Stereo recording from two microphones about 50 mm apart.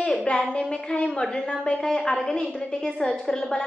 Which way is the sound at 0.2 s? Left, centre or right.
Centre.